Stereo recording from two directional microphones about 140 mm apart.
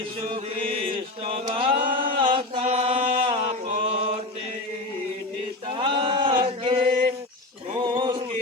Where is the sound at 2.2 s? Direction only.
40° right (ahead or behind).